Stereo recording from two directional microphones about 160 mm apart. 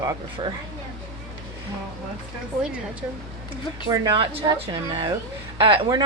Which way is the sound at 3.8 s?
25° right (ahead or behind).